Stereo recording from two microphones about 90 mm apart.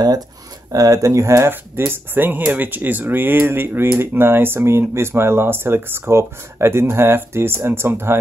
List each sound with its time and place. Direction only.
0.7 s speech: 40° right (ahead or behind)